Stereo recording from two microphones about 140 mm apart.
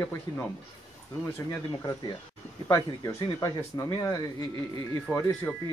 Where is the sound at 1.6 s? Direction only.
30° left (ahead or behind).